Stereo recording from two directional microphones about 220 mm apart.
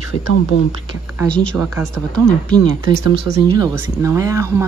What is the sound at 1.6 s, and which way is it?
Speech, 10° right (ahead or behind).